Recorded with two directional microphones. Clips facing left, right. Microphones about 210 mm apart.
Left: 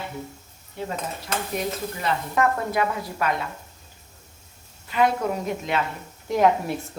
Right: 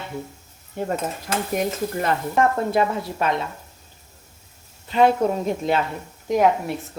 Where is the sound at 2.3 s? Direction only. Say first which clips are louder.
Right 3 dB; 30° right (ahead or behind).